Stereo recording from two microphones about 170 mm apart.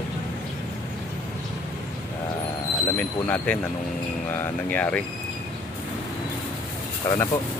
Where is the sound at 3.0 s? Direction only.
10° left (ahead or behind).